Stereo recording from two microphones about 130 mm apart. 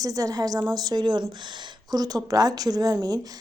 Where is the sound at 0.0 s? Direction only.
25° right (ahead or behind).